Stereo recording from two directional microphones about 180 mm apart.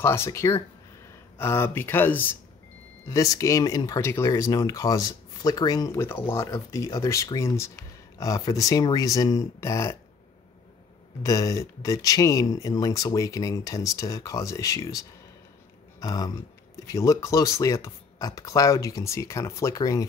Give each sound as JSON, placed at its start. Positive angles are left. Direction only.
{"t": 0.0, "sound": "speech", "side_deg": 15}
{"t": 11.2, "sound": "speech", "side_deg": 20}
{"t": 16.0, "sound": "speech", "side_deg": 20}